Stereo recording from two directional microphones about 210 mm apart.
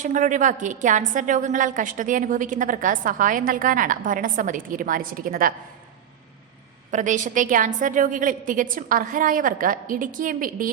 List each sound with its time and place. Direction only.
0.0 s a woman's voice: 35° right (ahead or behind)
6.9 s a woman's voice: 35° right (ahead or behind)